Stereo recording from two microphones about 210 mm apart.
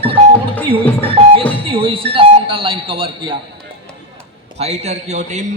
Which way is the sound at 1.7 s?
25° right (ahead or behind).